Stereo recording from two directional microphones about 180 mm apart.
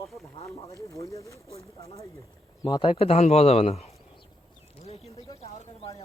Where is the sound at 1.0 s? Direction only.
15° left (ahead or behind).